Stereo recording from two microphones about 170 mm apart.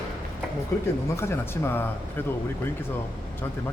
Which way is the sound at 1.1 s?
15° left (ahead or behind).